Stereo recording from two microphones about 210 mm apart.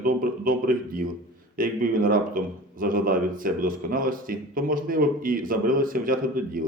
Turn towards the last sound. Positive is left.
turn(degrees=-40)  # may be behind; listen again after turning